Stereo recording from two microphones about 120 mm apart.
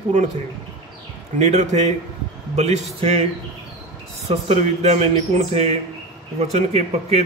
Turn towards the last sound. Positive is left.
turn(degrees=-60)  # may be behind; listen again after turning